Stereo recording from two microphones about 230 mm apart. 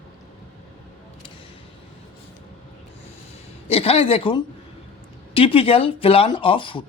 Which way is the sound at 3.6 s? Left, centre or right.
Left.